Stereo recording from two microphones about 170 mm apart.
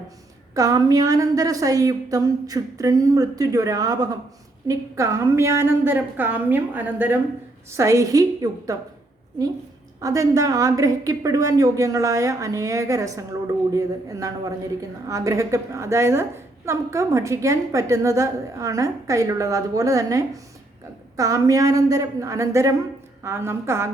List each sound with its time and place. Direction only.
0.5 s a woman's voice: 20° right (ahead or behind)
10.0 s a woman's voice: 20° right (ahead or behind)